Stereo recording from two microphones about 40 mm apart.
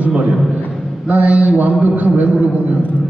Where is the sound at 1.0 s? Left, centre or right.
Right.